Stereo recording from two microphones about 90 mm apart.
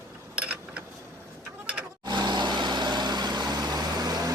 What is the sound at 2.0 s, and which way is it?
Vehicle, 55° right (ahead or behind).